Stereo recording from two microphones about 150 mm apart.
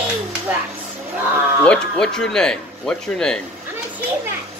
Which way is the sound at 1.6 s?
5° left (ahead or behind).